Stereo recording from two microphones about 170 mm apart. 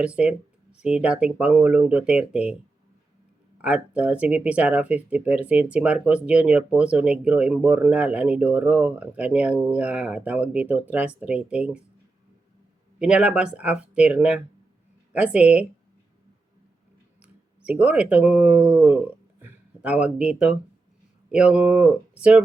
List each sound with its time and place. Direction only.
0.0 s speech: 5° right (ahead or behind)
3.6 s speech: 5° right (ahead or behind)
13.0 s speech: 5° right (ahead or behind)
17.7 s speech: 10° right (ahead or behind)